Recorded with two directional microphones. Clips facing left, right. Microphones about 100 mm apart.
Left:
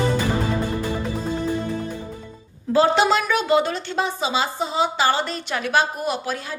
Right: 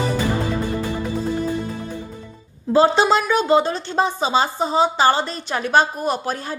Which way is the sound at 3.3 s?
30° right (ahead or behind).